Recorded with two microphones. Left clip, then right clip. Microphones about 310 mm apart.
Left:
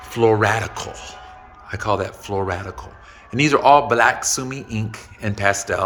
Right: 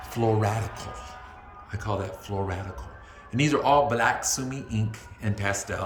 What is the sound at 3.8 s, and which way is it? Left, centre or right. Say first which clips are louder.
Speech: left 7 dB; centre.